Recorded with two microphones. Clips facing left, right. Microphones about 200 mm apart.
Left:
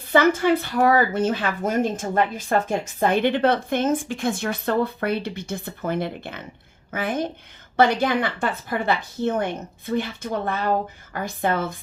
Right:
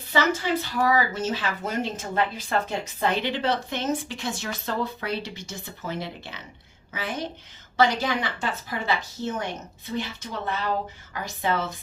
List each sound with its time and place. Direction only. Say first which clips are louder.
0.1 s a woman's voice: left 6 dB; 55° left (ahead or behind)